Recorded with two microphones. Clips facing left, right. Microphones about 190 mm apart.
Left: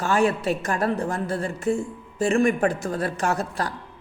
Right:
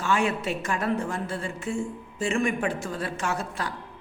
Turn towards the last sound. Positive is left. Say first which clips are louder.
# left 5 dB
turn(degrees=40)  # may be behind; listen again after turning